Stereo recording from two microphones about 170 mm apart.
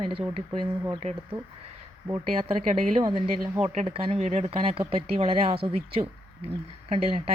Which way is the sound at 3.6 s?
40° right (ahead or behind).